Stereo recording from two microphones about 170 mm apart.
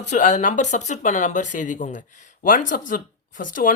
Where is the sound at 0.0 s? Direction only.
45° left (ahead or behind).